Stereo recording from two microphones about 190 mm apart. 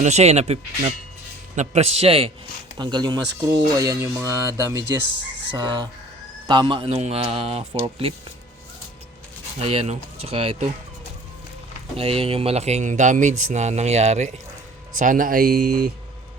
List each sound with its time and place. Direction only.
0.0 s speech: 35° right (ahead or behind)
9.6 s speech: 30° right (ahead or behind)
11.9 s speech: 30° right (ahead or behind); by 15.9 s 55° right (ahead or behind)